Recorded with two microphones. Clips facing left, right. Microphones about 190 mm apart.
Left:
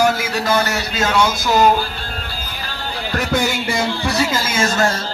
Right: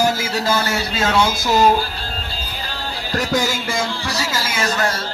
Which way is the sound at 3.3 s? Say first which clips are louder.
Left 2 dB; 60° left (ahead or behind).